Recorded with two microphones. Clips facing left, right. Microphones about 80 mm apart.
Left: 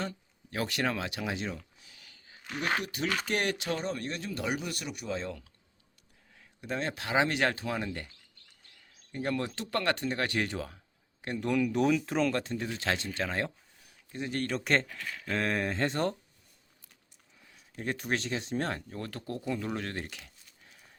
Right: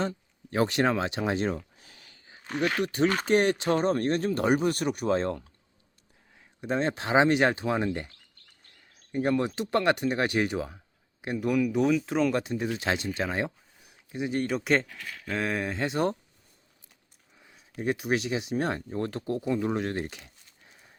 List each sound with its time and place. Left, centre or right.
0.0 s a sound: right
2.8 s speech: right
3.2 s speech: right
3.7 s speech: right
6.3 s speech: right
9.1 s speech: centre
12.3 s speech: centre
17.4 s speech: centre